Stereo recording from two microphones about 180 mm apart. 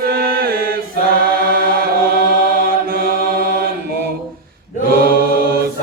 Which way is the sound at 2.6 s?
55° right (ahead or behind).